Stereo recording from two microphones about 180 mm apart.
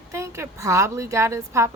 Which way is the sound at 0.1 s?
15° right (ahead or behind).